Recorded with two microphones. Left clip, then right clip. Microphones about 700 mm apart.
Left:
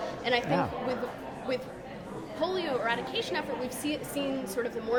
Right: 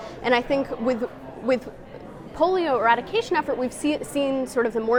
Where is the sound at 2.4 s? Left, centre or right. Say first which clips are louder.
Right 10 dB; right.